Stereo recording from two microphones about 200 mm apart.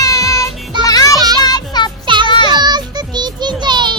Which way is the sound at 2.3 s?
25° left (ahead or behind).